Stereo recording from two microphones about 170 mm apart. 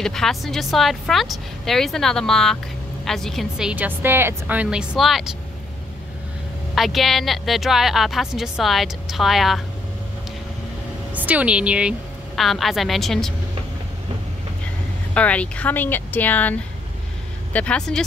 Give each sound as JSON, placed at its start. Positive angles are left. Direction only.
{"t": 0.0, "sound": "speech", "side_deg": 0}
{"t": 6.7, "sound": "speech", "side_deg": 0}
{"t": 11.1, "sound": "a woman's voice", "side_deg": -10}
{"t": 15.1, "sound": "speech", "side_deg": 10}